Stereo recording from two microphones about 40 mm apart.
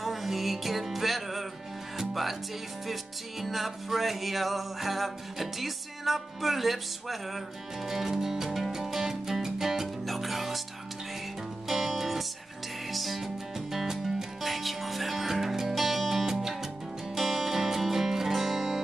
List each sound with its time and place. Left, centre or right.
0.0 s music: centre
11.6 s music: centre